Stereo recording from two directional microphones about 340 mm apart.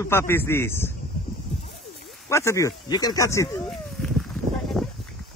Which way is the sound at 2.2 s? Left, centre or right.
Centre.